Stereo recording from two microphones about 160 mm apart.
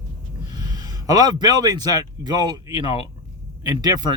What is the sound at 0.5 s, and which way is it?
Speech, 25° right (ahead or behind).